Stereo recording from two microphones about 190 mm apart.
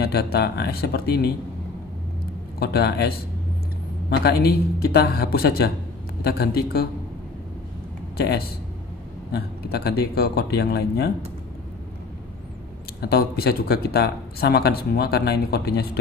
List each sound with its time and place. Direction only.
0.0 s speech: 55° left (ahead or behind)
2.6 s speech: 55° left (ahead or behind)
4.1 s speech: 60° left (ahead or behind)
9.3 s speech: 55° left (ahead or behind)
13.0 s speech: 55° left (ahead or behind)